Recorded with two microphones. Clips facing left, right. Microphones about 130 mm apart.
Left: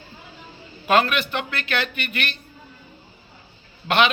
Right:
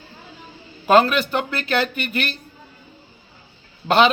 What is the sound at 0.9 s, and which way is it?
A man's voice, 35° right (ahead or behind).